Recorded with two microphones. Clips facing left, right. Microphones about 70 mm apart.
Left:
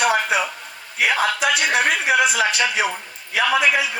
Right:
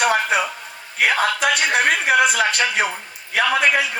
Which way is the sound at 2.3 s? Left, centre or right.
Right.